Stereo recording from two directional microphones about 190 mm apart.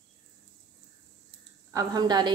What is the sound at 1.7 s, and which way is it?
Speech, 20° right (ahead or behind).